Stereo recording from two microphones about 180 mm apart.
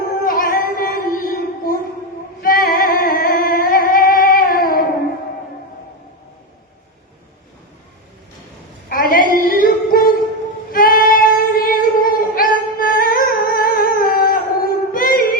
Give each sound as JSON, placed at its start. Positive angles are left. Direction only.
{"t": 0.0, "sound": "music", "side_deg": 55}
{"t": 8.9, "sound": "a sound", "side_deg": 55}
{"t": 10.7, "sound": "female singing", "side_deg": 55}